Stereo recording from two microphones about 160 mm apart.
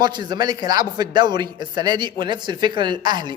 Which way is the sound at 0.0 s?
25° right (ahead or behind).